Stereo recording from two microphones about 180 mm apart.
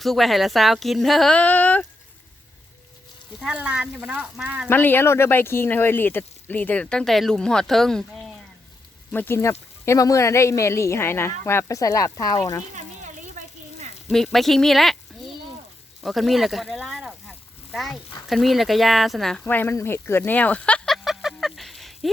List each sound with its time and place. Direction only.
0.0 s speech: centre (ahead or behind)
3.4 s speech: 5° right (ahead or behind)
4.7 s speech: 10° left (ahead or behind)
9.1 s speech: 15° left (ahead or behind)
13.4 s a sound: 45° right (ahead or behind)
14.1 s speech: centre (ahead or behind)
16.0 s speech: centre (ahead or behind)